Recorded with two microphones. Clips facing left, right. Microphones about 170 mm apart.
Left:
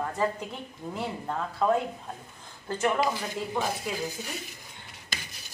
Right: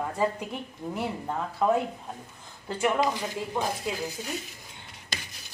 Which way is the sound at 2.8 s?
15° right (ahead or behind).